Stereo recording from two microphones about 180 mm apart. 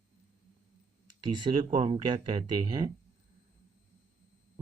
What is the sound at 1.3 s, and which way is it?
Speech, 25° right (ahead or behind).